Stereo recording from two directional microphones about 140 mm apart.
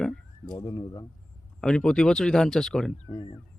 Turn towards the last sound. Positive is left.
turn(degrees=35)  # may be behind; listen again after turning